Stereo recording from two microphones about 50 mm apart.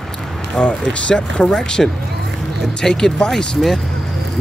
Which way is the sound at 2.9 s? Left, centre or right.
Centre.